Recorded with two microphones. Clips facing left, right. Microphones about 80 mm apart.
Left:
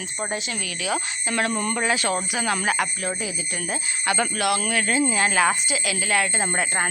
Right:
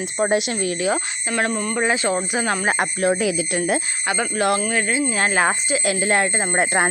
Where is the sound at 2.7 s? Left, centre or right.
Right.